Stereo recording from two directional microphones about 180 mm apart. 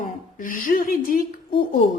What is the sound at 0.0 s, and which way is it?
A woman's voice, 50° left (ahead or behind).